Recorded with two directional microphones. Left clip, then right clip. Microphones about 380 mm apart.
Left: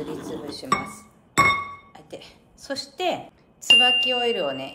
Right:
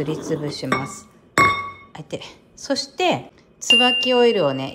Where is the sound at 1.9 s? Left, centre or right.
Centre.